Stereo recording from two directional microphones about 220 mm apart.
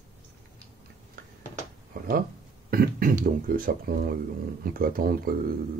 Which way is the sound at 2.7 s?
40° right (ahead or behind).